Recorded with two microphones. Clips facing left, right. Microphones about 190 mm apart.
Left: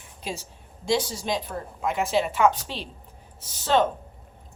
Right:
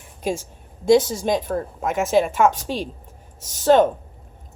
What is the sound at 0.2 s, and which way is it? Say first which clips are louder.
A woman's voice: right 9 dB; 50° right (ahead or behind).